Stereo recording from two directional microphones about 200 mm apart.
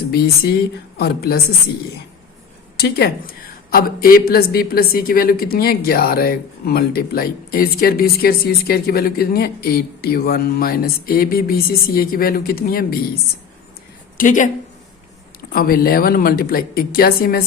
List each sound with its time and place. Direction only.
0.9 s a woman's voice: 50° left (ahead or behind)
2.7 s a woman's voice: 50° left (ahead or behind)
14.2 s speech: 40° left (ahead or behind)
15.5 s a woman's voice: 50° left (ahead or behind)